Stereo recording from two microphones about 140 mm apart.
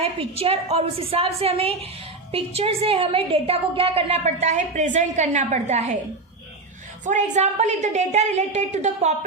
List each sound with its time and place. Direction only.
0.0 s a woman's voice: 45° right (ahead or behind)
7.0 s a woman's voice: 60° right (ahead or behind)